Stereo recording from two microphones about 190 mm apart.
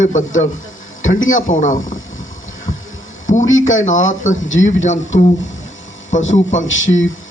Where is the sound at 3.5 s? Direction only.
90° left.